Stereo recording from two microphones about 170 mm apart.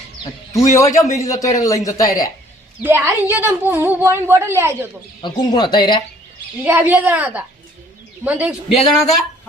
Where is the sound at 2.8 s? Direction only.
15° right (ahead or behind).